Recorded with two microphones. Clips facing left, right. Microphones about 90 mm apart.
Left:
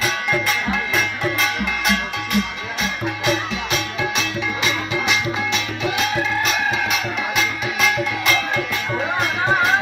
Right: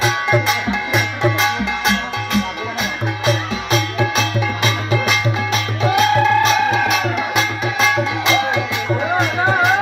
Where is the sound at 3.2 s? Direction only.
35° right (ahead or behind).